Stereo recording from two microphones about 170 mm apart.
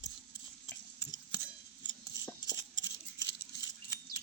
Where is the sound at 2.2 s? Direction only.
20° left (ahead or behind).